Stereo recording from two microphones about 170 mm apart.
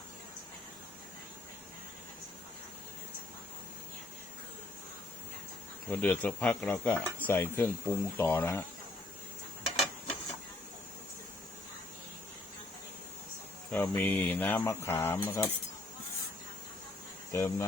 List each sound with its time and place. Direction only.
5.9 s speech: 10° left (ahead or behind)
9.6 s printer: centre (ahead or behind)
13.7 s speech: 10° left (ahead or behind)
17.3 s speech: 15° left (ahead or behind)